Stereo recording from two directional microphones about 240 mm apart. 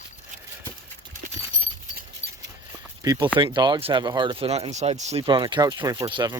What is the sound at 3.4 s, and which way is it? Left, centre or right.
Speech, centre.